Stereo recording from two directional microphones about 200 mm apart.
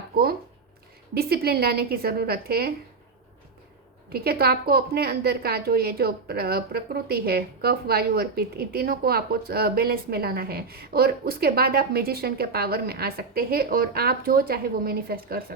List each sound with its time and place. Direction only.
1.1 s a woman's voice: 50° right (ahead or behind)
4.1 s a woman's voice: 50° right (ahead or behind)